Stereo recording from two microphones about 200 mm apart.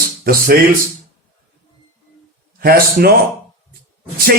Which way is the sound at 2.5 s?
50° right (ahead or behind).